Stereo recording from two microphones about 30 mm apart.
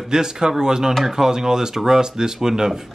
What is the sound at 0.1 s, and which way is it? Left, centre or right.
Speech, right.